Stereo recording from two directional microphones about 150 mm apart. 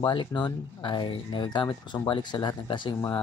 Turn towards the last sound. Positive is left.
turn(degrees=30)  # may be behind; listen again after turning